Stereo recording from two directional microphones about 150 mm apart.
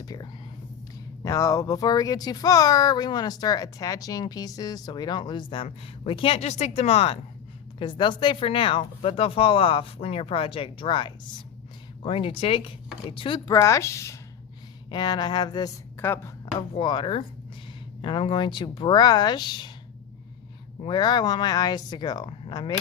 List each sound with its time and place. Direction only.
0.0 s speech: 25° left (ahead or behind)
13.5 s speech: 20° left (ahead or behind)
14.8 s speech: 30° left (ahead or behind)
16.0 s a woman's voice: 15° left (ahead or behind)
16.6 s speech: 30° left (ahead or behind)
20.8 s speech: 30° left (ahead or behind)